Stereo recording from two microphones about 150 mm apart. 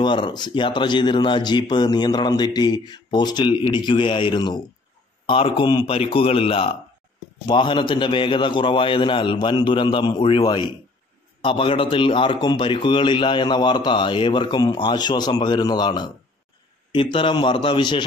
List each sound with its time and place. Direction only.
0.0 s a man's voice: 30° left (ahead or behind)